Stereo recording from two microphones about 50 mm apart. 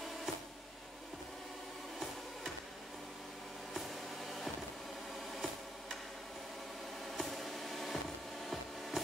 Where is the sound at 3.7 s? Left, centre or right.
Centre.